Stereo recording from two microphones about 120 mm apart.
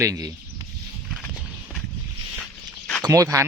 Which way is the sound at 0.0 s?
30° right (ahead or behind).